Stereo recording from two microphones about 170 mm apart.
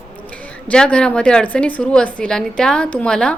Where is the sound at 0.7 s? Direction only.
5° left (ahead or behind).